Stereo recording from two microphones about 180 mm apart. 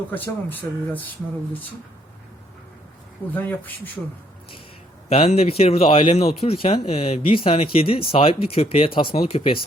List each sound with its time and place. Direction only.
0.1 s speech: 10° left (ahead or behind)
3.3 s speech: 10° left (ahead or behind)
5.0 s speech: 35° left (ahead or behind)